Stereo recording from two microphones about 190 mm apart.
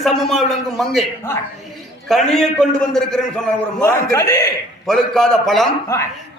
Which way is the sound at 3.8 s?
15° left (ahead or behind).